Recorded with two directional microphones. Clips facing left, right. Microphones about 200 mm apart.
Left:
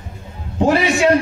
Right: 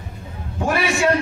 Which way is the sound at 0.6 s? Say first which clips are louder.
Left 5 dB; 20° left (ahead or behind).